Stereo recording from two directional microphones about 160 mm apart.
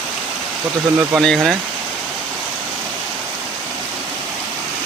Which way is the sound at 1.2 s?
5° left (ahead or behind).